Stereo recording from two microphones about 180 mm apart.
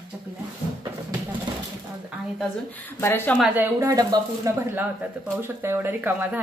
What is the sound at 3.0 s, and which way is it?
Speech, 10° left (ahead or behind).